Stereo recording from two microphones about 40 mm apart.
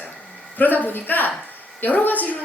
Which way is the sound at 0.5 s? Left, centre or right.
Left.